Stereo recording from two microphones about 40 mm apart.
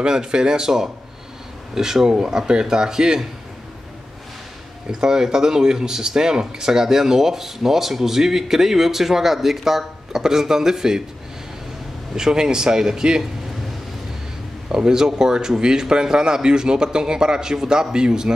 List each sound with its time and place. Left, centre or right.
0.0 s speech: centre
5.0 s speech: centre
12.2 s speech: centre
14.9 s speech: centre